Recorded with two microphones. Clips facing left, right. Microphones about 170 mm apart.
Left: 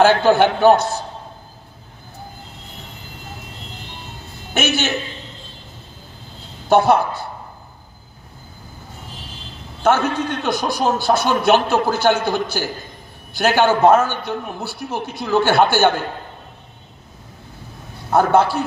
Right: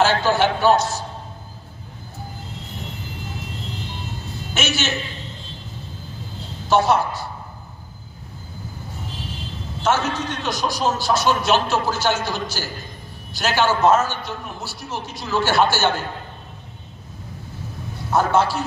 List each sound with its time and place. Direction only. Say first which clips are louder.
0.0 s a man's voice: left 5 dB; 55° left (ahead or behind)
4.6 s a man's voice: left 4 dB; 55° left (ahead or behind)
6.7 s a man's voice: left 3 dB; 55° left (ahead or behind)
9.8 s a man's voice: left 4 dB; 55° left (ahead or behind)
18.1 s a man's voice: left 4 dB; 55° left (ahead or behind)